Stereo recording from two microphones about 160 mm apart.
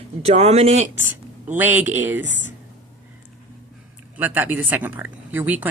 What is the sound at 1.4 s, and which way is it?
Speech, 10° right (ahead or behind).